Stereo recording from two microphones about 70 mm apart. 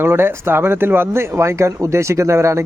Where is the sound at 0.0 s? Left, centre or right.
Right.